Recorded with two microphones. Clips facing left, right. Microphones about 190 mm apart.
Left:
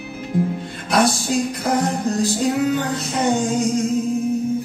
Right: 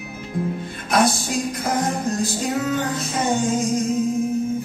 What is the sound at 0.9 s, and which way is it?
Music, 65° left (ahead or behind).